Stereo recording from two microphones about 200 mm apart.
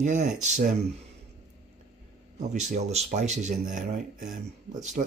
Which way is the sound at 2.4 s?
35° right (ahead or behind).